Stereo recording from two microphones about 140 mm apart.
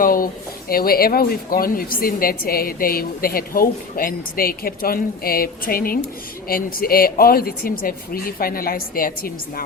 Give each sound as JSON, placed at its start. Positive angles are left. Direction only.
{"t": 0.0, "sound": "speech", "side_deg": 90}